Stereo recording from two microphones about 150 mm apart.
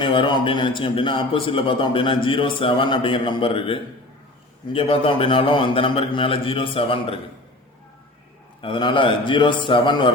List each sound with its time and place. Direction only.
0.0 s a man's voice: 35° left (ahead or behind)
8.6 s a man's voice: 30° left (ahead or behind)